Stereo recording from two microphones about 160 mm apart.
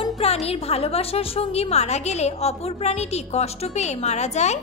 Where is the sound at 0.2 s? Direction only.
40° left (ahead or behind).